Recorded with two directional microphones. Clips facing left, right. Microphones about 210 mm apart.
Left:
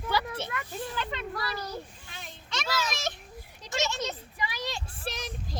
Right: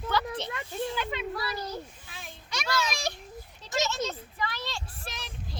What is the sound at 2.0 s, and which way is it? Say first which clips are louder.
Children playing: even; centre (ahead or behind).